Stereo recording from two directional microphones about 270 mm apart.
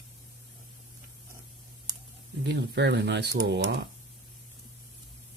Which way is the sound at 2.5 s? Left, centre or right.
Right.